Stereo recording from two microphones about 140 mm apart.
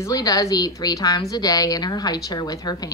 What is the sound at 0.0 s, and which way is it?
A woman's voice, 25° left (ahead or behind).